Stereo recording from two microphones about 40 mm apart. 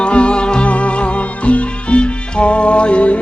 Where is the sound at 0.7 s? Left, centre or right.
Left.